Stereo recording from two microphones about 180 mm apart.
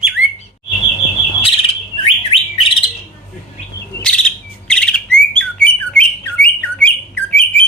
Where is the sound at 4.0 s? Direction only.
5° left (ahead or behind).